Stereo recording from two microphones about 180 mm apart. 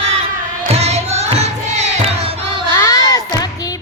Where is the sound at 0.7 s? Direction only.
35° right (ahead or behind).